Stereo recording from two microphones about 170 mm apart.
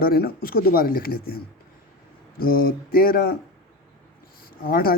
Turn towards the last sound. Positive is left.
turn(degrees=60)  # may be behind; listen again after turning